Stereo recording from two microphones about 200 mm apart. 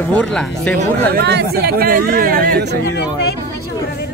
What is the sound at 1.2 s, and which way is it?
Speech, 55° right (ahead or behind).